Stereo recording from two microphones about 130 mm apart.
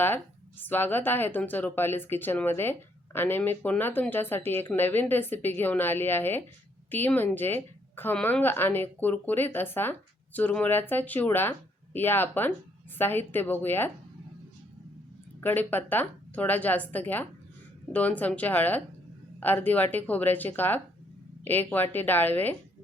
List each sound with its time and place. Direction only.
0.6 s speech: 15° left (ahead or behind)
15.4 s speech: 15° left (ahead or behind)